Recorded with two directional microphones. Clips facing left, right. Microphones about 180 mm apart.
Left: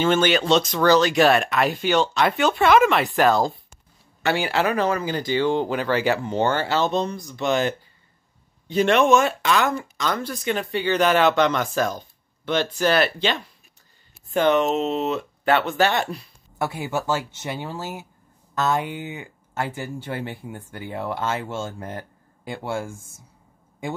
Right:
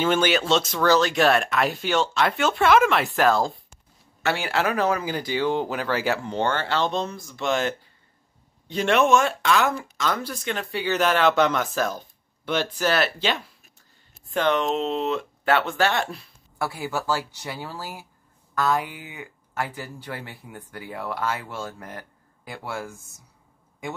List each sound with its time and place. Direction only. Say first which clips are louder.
0.0 s speech: left 2 dB; 5° right (ahead or behind)
16.5 s a man's voice: left 2 dB; 20° left (ahead or behind)